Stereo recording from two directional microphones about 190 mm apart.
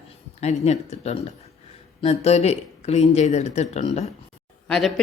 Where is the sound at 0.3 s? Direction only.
35° left (ahead or behind).